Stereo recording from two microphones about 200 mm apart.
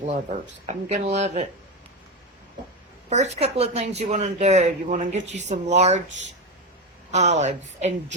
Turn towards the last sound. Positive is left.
turn(degrees=-35)  # may be behind; listen again after turning